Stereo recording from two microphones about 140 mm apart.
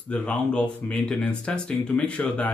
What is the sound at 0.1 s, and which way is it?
Speech, 10° left (ahead or behind).